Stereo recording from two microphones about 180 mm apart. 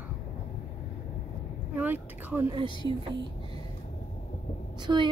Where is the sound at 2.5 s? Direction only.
30° right (ahead or behind).